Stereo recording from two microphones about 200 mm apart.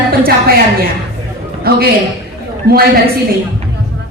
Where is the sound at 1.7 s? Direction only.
50° right (ahead or behind).